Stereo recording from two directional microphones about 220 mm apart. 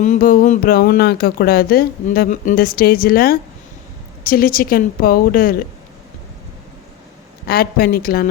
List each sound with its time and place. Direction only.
0.0 s a woman's voice: 35° left (ahead or behind)
7.4 s speech: 45° left (ahead or behind)